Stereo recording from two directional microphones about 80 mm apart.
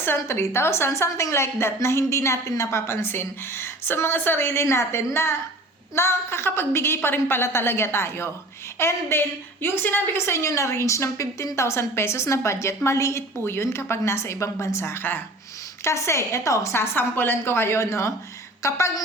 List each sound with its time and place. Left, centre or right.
0.0 s a woman's voice: left